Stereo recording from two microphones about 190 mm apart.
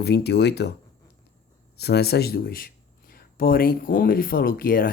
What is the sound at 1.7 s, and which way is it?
Speech, 60° left (ahead or behind).